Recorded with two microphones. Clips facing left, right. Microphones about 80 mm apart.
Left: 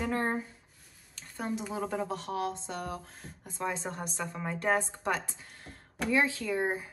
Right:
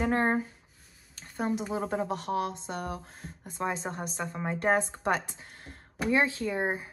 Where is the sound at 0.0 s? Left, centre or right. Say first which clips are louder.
Right 4 dB; right.